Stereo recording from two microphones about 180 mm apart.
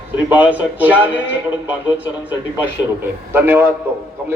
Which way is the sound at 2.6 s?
10° right (ahead or behind).